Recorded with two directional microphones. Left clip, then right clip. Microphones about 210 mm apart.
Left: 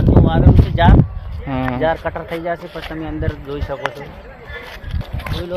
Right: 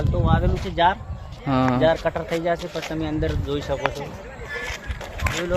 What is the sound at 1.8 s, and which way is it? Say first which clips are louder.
Speech: left 1 dB; 10° left (ahead or behind).